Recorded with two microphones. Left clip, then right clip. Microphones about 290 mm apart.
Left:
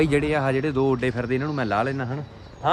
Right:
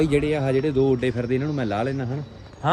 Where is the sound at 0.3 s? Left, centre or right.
Left.